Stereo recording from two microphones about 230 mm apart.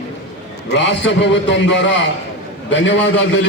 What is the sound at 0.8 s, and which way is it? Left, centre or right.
A man's voice, left.